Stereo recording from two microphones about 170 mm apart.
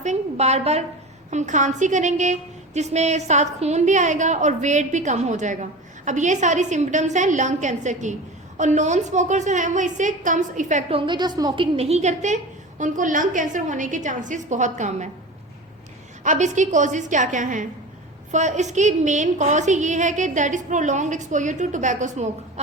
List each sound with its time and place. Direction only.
0.0 s a woman's voice: 40° right (ahead or behind)
16.2 s a woman's voice: 45° right (ahead or behind)